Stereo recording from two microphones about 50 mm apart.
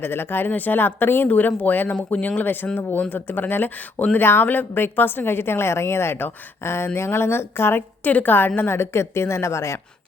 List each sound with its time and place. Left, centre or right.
0.0 s a woman's voice: left
0.5 s a woman's voice: left
8.0 s a woman's voice: left